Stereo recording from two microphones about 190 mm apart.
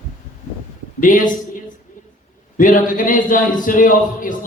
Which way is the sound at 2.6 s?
45° left (ahead or behind).